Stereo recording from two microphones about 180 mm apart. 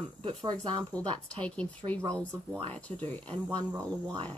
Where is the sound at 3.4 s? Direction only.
20° right (ahead or behind).